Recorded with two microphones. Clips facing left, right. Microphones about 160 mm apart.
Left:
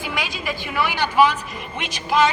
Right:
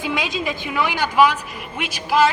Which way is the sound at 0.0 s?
20° right (ahead or behind).